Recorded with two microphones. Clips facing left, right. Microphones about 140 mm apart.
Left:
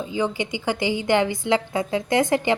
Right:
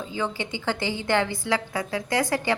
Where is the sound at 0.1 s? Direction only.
15° left (ahead or behind).